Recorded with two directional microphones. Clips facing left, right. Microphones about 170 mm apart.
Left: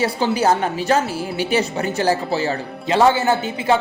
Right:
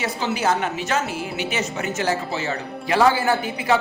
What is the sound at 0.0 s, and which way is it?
A woman's voice, 35° left (ahead or behind).